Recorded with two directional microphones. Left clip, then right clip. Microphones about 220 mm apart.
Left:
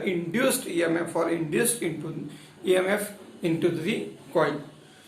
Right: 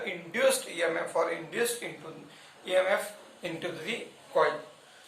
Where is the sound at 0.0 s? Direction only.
20° left (ahead or behind).